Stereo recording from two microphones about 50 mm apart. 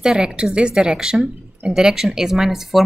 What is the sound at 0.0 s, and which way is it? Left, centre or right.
A woman's voice, centre.